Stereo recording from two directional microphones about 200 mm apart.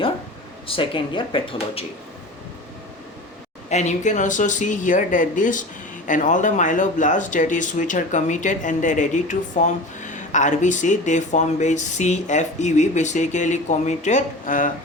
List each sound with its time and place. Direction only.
0.7 s speech: 25° left (ahead or behind)
3.7 s speech: 35° left (ahead or behind)